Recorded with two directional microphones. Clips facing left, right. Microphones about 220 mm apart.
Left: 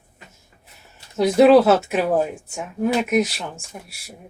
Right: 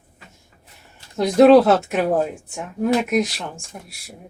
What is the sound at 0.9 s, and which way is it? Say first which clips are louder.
Speech: right 1 dB; 5° left (ahead or behind).